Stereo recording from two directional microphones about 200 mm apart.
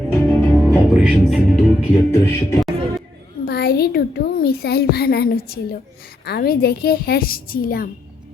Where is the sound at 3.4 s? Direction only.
55° left (ahead or behind).